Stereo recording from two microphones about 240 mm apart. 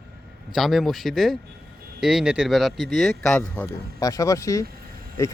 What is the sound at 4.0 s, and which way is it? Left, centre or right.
Speech, centre.